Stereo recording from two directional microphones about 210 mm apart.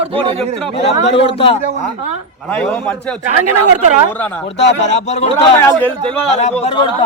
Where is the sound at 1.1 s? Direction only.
25° left (ahead or behind).